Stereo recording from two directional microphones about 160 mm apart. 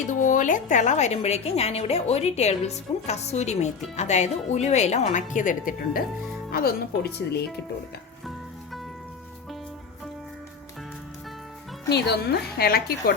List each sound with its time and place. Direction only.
0.1 s a woman's voice: 55° left (ahead or behind)
6.5 s speech: 70° left (ahead or behind); by 7.4 s 90° left
11.9 s speech: 90° left; by 13.1 s 75° left (ahead or behind)